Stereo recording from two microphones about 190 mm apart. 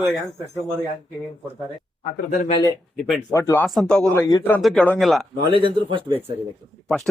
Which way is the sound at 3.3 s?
15° left (ahead or behind).